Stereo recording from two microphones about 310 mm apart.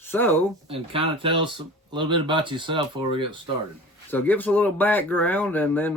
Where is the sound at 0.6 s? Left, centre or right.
Centre.